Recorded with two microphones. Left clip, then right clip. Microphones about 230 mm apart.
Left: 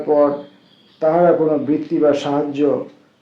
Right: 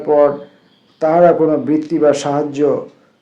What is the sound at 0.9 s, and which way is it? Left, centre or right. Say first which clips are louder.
Speech: right 3 dB; right.